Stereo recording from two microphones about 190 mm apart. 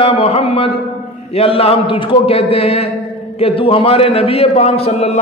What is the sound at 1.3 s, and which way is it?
A man's voice, 30° left (ahead or behind).